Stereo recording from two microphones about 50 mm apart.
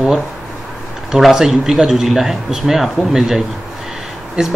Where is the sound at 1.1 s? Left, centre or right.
Centre.